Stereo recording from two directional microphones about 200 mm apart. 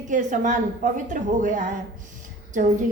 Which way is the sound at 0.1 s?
40° right (ahead or behind).